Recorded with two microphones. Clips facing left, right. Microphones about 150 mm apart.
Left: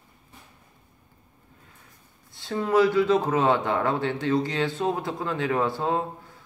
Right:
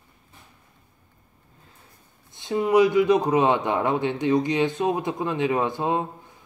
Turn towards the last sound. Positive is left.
turn(degrees=-20)  # may be behind; listen again after turning